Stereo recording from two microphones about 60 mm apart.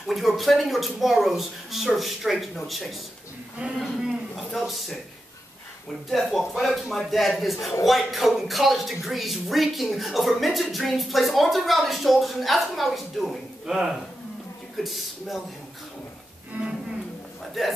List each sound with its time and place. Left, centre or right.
0.0 s speech: centre
3.6 s a man's voice: right
4.5 s speech: centre
6.0 s speech: centre
17.6 s speech: centre